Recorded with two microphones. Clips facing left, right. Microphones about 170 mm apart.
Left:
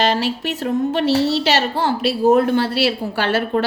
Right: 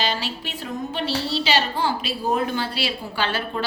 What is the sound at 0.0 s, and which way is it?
A woman's voice, 75° left (ahead or behind).